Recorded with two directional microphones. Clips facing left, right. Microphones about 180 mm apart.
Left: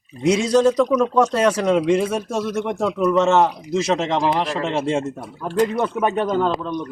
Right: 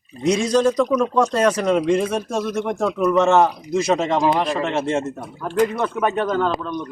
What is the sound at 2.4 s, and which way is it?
Speech, 10° right (ahead or behind).